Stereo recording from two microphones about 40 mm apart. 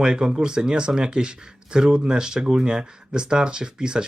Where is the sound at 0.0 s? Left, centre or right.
Centre.